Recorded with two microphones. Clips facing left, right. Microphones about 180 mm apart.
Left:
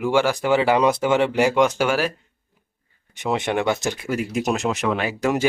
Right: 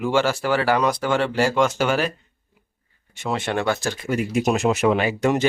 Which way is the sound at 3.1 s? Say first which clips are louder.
Left 2 dB; 15° left (ahead or behind).